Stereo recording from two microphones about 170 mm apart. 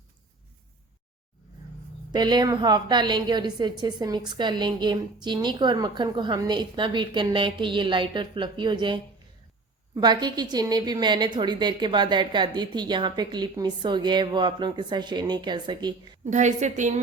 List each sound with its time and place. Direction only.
2.1 s a woman's voice: 25° right (ahead or behind)
16.2 s a woman's voice: 45° right (ahead or behind)